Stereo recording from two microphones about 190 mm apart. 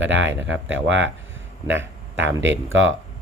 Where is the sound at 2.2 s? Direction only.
70° right (ahead or behind); by 2.9 s 90° right.